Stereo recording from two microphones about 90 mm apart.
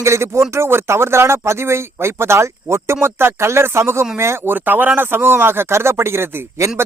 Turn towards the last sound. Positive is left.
turn(degrees=-30)  # may be behind; listen again after turning